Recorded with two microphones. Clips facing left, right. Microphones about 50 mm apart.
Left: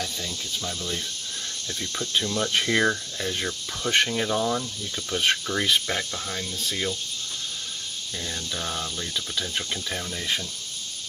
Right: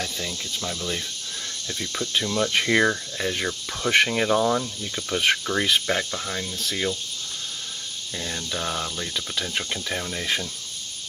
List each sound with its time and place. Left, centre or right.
0.0 s cricket: right
1.8 s speech: centre
3.2 s cricket: right
3.4 s speech: centre
4.1 s cricket: right
4.4 s speech: centre
8.2 s speech: centre